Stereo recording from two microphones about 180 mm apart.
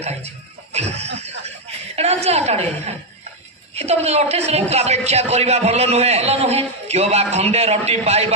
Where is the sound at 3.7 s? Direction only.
35° right (ahead or behind).